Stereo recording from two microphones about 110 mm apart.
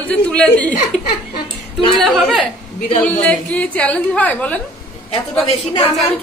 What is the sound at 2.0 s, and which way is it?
A woman's voice, centre (ahead or behind).